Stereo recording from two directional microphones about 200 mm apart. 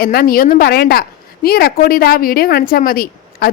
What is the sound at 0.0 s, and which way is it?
A woman's voice, 50° left (ahead or behind).